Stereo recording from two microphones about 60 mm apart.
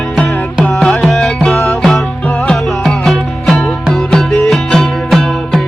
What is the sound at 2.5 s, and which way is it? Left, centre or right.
Music, centre.